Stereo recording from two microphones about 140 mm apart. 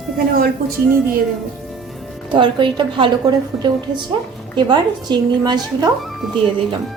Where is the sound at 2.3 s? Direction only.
35° right (ahead or behind).